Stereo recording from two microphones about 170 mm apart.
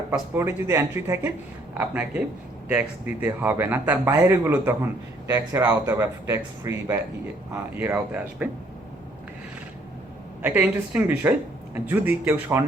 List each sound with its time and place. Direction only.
0.1 s speech: 15° right (ahead or behind)
10.4 s speech: 10° right (ahead or behind)